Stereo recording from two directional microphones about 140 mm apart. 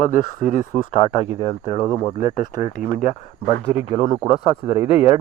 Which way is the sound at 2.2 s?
60° left (ahead or behind).